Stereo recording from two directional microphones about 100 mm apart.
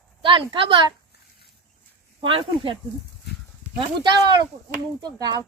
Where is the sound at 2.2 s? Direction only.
65° right (ahead or behind).